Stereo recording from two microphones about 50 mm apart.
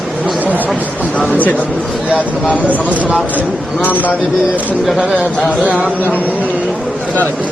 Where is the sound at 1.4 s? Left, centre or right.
Left.